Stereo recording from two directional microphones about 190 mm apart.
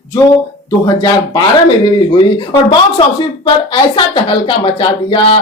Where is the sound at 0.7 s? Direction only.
20° left (ahead or behind).